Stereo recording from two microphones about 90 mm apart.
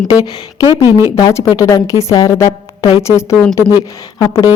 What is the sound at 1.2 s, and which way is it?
A woman's voice, 40° left (ahead or behind).